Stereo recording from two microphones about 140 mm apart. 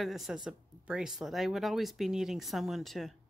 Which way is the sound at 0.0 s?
Centre (ahead or behind).